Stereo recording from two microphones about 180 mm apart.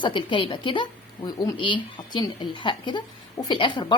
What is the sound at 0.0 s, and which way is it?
A woman's voice, 25° left (ahead or behind).